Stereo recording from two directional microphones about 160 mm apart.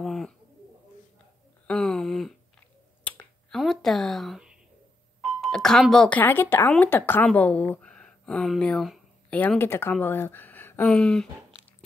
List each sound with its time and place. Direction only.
0.0 s bird: centre (ahead or behind)
1.7 s a sound: 5° left (ahead or behind)
5.4 s a woman's voice: 5° left (ahead or behind)